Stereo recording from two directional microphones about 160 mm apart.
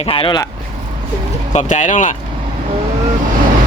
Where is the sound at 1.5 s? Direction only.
50° left (ahead or behind).